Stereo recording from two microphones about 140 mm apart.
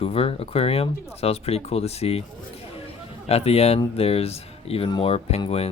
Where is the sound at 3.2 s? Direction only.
45° left (ahead or behind).